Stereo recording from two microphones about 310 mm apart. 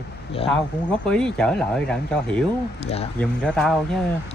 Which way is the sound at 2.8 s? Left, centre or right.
Centre.